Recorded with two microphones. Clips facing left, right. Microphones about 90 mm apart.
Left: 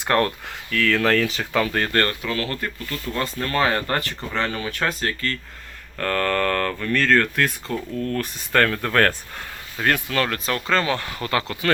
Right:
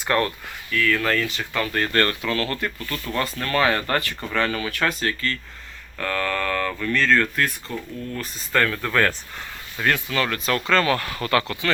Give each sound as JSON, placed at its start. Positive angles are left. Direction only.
{"t": 0.3, "sound": "speech", "side_deg": 85}
{"t": 1.9, "sound": "speech", "side_deg": 40}
{"t": 2.2, "sound": "speech", "side_deg": 25}
{"t": 7.7, "sound": "speech", "side_deg": -10}
{"t": 8.1, "sound": "speech", "side_deg": 55}